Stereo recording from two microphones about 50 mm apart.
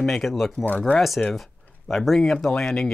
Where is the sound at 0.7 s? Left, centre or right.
Left.